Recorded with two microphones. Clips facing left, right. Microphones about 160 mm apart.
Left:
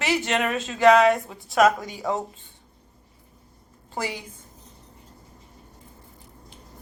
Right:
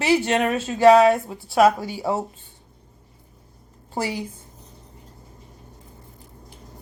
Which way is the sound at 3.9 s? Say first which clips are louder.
Right 4 dB; 35° right (ahead or behind).